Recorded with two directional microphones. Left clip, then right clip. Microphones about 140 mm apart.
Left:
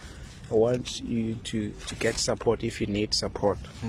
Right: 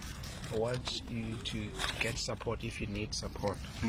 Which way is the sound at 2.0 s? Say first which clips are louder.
Left 9 dB; 80° left.